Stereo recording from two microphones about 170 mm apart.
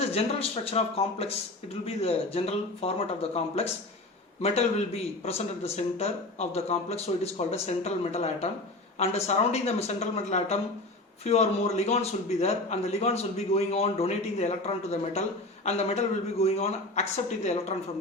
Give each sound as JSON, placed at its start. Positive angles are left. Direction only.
{"t": 0.1, "sound": "a man's voice", "side_deg": 35}
{"t": 5.2, "sound": "a man's voice", "side_deg": 35}